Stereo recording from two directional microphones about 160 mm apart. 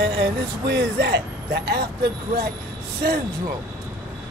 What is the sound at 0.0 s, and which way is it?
Speech, 90° right.